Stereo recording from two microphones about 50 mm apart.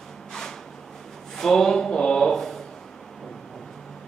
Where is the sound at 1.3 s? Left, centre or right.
Centre.